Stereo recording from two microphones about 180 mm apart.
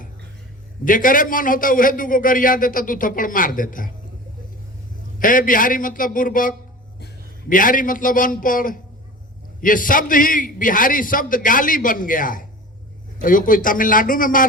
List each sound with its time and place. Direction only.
0.9 s a man's voice: 50° left (ahead or behind)
5.2 s a man's voice: 50° left (ahead or behind)